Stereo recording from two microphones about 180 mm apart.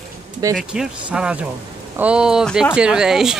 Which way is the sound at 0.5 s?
5° right (ahead or behind).